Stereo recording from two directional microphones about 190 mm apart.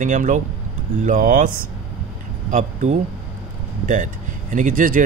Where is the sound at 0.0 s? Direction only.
40° right (ahead or behind).